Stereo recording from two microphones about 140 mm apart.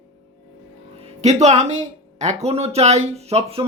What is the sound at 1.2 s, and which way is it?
Speech, 55° right (ahead or behind).